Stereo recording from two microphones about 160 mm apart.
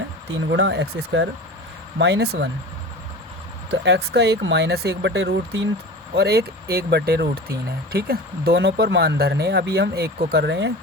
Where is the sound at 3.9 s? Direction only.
90° right.